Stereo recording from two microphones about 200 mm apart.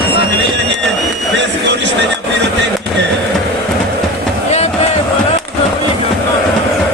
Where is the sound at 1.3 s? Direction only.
60° right (ahead or behind).